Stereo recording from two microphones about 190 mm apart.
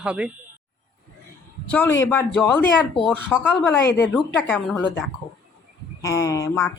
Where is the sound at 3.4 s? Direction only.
10° left (ahead or behind).